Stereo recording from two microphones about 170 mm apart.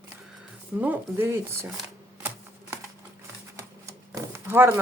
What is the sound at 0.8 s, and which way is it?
Speech, 10° right (ahead or behind).